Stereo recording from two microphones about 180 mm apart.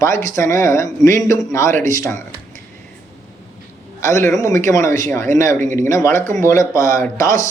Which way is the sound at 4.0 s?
15° left (ahead or behind).